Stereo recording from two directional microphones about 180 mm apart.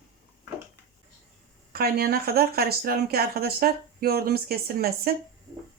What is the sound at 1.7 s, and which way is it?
Speech, 60° right (ahead or behind).